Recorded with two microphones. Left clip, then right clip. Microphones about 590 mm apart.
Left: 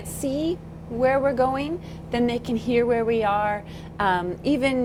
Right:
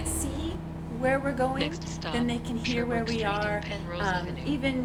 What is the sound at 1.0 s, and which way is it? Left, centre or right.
A woman's voice, left.